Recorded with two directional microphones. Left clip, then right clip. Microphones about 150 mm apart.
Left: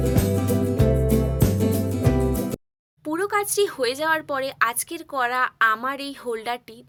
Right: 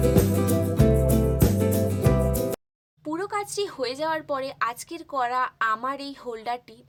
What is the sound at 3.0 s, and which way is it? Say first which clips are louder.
Speech: left 5 dB; 20° left (ahead or behind).